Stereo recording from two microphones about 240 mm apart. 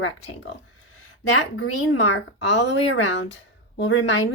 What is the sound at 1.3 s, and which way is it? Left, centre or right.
A woman's voice, left.